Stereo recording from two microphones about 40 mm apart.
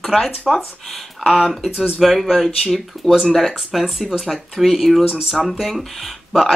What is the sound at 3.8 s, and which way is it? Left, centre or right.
Speech, centre.